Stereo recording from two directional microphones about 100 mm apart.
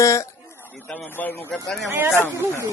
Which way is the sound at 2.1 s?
20° left (ahead or behind).